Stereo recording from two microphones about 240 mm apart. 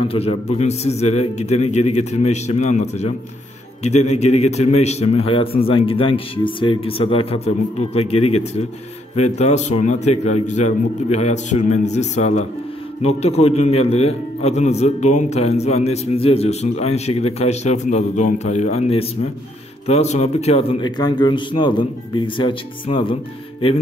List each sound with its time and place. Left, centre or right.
0.1 s a man's voice: left